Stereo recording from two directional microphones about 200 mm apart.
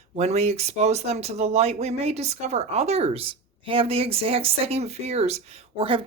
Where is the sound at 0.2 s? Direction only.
35° right (ahead or behind).